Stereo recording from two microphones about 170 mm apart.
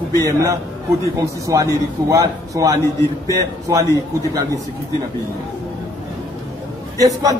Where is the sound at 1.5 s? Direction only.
20° right (ahead or behind).